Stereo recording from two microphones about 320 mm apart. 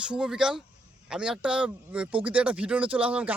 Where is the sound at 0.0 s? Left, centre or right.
Centre.